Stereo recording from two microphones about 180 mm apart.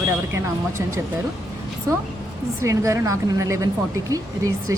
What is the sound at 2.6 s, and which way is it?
Speech, 15° right (ahead or behind).